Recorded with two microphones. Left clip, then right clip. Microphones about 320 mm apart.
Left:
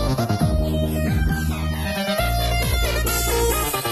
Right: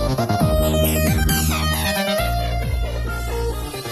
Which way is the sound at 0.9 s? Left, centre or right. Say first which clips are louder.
Right 5 dB; right.